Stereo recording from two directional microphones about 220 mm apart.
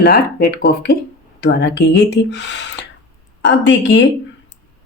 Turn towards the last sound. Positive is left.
turn(degrees=55)  # may be behind; listen again after turning